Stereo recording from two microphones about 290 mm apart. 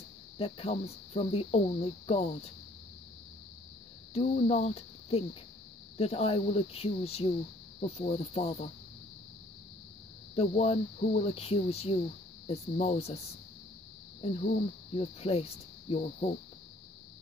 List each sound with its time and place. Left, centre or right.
0.4 s speech: centre
4.1 s speech: left
10.3 s speech: left
14.2 s speech: left